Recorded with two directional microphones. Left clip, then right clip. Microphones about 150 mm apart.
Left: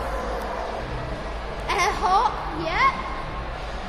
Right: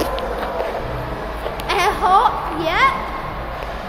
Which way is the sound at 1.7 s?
15° right (ahead or behind).